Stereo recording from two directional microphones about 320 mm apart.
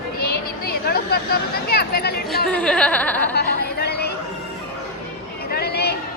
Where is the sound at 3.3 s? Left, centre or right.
Left.